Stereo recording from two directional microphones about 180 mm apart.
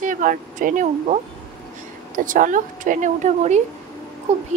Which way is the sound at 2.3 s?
45° right (ahead or behind).